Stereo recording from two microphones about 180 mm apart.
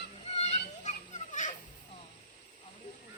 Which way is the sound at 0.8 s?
45° left (ahead or behind).